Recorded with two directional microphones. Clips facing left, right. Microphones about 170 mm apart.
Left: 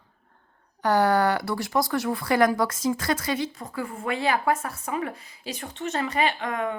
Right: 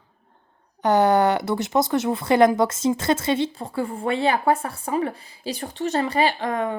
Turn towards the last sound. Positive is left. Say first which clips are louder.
# right 4 dB
turn(degrees=-35)  # may be behind; listen again after turning